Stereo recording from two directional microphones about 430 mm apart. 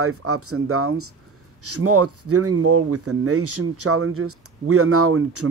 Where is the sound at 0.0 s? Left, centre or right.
Right.